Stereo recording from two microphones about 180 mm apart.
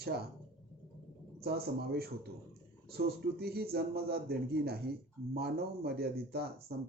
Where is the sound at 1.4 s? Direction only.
60° right (ahead or behind).